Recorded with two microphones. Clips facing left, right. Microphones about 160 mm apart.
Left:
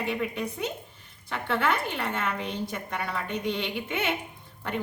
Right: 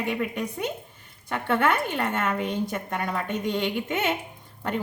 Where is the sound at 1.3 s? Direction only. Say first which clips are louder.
Right 3 dB; 50° right (ahead or behind).